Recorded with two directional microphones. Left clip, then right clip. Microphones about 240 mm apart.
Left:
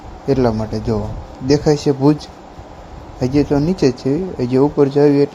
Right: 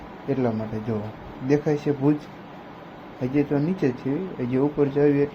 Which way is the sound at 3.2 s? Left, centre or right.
Left.